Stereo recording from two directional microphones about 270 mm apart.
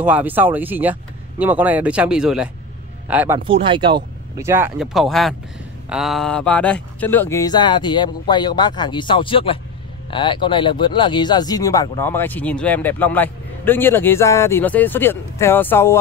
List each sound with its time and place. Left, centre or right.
0.0 s speech: centre
3.3 s speech: centre